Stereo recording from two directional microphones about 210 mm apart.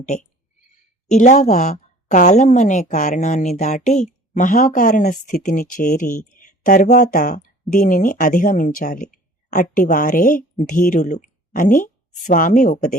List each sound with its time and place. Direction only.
0.0 s a woman's voice: 35° left (ahead or behind)